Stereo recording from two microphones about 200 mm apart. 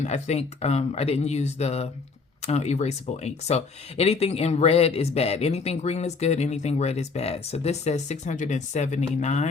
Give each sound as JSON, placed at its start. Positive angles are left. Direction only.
{"t": 0.0, "sound": "speech", "side_deg": 35}